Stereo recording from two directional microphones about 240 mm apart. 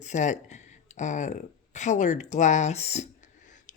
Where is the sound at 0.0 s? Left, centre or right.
Left.